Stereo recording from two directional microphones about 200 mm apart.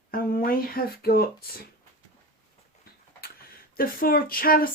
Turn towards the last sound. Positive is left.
turn(degrees=45)  # may be behind; listen again after turning